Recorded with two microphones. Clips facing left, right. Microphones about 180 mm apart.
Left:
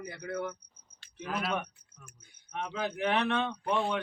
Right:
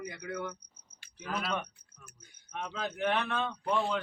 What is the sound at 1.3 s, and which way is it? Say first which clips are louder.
Speech: left 2 dB; 5° left (ahead or behind).